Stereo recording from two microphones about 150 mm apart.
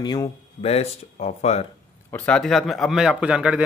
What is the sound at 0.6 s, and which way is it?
Speech, 45° left (ahead or behind).